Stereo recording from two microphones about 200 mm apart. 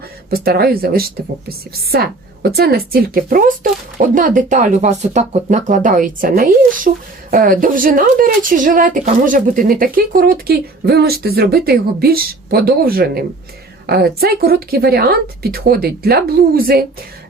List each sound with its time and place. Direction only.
0.3 s speech: 50° right (ahead or behind)